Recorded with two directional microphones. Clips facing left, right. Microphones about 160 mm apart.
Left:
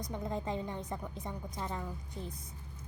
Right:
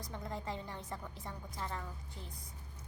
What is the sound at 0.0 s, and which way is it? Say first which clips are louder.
A woman's voice: left 5 dB; 20° left (ahead or behind).